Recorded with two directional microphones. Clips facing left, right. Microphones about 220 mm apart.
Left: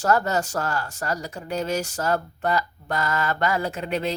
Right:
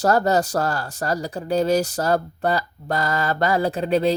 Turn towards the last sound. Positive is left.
turn(degrees=-35)  # may be behind; listen again after turning